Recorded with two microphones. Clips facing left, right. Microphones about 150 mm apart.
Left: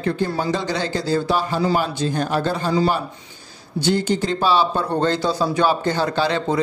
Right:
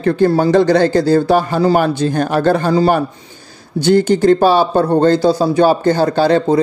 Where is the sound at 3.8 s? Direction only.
55° right (ahead or behind).